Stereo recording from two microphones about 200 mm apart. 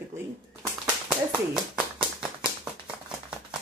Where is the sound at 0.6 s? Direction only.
5° right (ahead or behind).